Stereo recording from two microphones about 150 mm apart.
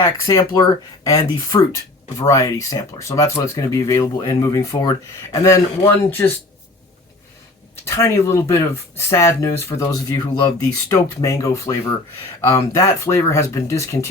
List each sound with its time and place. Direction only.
0.0 s speech: 25° left (ahead or behind)
7.9 s speech: 20° left (ahead or behind)